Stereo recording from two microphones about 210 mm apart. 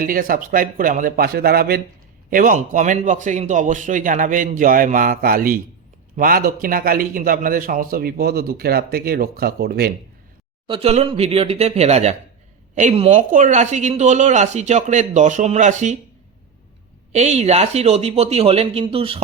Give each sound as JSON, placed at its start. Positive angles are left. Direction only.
{"t": 0.0, "sound": "a man's voice", "side_deg": -45}
{"t": 10.7, "sound": "a man's voice", "side_deg": -30}
{"t": 17.1, "sound": "speech", "side_deg": -30}